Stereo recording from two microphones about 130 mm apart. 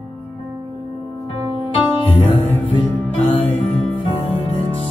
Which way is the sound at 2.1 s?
50° left (ahead or behind).